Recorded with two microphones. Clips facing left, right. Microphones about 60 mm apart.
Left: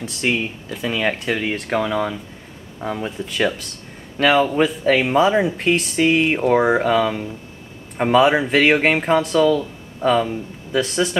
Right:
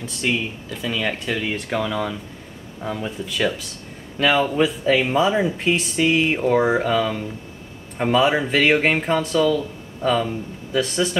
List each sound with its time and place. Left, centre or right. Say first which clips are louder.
0.0 s speech: left 2 dB; centre
0.8 s speech: left 3 dB; centre
3.1 s speech: left 1 dB; centre